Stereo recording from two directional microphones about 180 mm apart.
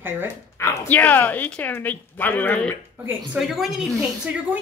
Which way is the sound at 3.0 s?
5° right (ahead or behind).